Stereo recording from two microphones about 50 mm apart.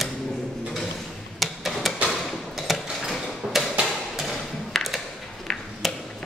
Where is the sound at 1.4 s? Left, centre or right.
Centre.